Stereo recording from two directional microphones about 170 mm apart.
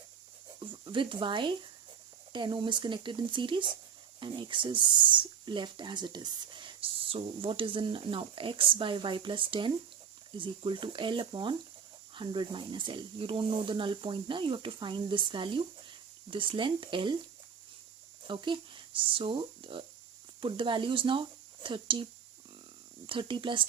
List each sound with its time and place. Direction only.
0.6 s speech: 30° right (ahead or behind)
18.3 s speech: 25° right (ahead or behind)
23.0 s speech: 30° right (ahead or behind)